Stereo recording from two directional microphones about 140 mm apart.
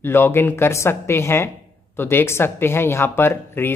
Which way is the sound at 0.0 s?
15° left (ahead or behind).